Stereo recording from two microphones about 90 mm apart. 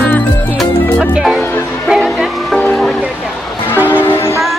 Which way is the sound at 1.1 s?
10° right (ahead or behind).